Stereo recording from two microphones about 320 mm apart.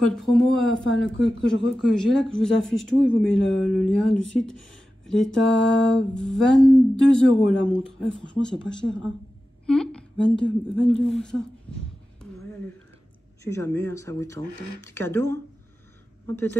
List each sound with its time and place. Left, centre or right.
0.0 s a woman's voice: centre
13.4 s speech: centre
16.3 s speech: centre